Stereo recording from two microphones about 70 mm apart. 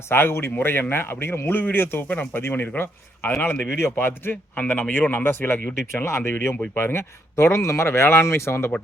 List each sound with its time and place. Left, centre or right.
0.1 s a man's voice: left
2.0 s speech: left
2.4 s speech: left
5.9 s a man's voice: left